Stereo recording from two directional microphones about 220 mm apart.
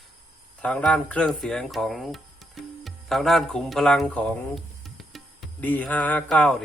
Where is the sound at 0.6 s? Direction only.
5° left (ahead or behind).